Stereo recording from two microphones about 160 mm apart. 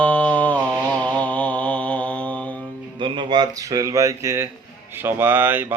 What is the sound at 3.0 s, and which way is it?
A man's voice, 30° right (ahead or behind).